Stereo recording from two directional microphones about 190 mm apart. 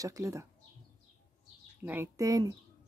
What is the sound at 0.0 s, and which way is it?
Speech, 15° right (ahead or behind).